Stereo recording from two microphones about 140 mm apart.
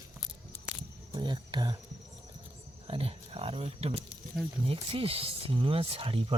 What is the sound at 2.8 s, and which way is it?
Speech, 40° right (ahead or behind).